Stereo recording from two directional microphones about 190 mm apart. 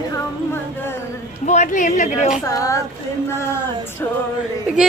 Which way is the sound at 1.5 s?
40° left (ahead or behind).